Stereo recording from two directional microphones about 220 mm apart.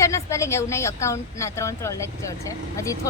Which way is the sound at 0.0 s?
15° left (ahead or behind).